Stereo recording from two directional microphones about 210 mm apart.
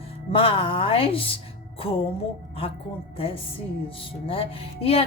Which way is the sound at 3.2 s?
25° left (ahead or behind).